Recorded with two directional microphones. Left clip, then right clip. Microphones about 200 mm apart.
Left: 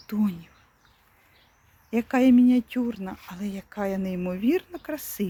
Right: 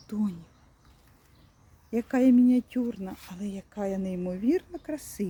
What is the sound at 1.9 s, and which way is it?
Speech, 15° right (ahead or behind).